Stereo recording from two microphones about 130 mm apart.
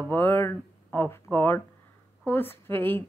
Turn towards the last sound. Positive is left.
turn(degrees=15)  # may be behind; listen again after turning